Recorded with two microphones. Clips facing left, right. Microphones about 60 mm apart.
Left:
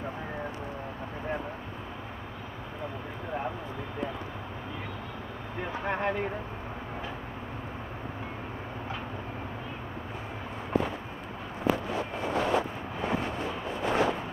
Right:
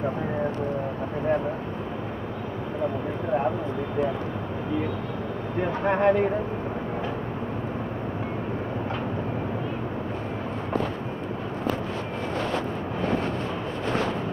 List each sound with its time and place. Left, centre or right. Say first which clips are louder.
5.6 s speech: right 8 dB; right